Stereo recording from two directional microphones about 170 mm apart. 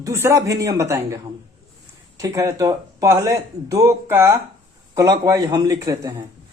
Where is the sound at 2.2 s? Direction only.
20° right (ahead or behind).